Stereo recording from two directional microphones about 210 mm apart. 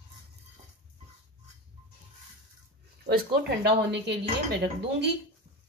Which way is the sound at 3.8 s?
55° right (ahead or behind).